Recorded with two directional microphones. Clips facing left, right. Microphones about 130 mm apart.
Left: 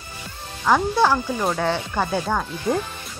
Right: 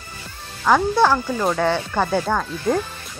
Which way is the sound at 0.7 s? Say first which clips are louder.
Right 2 dB; 5° left (ahead or behind).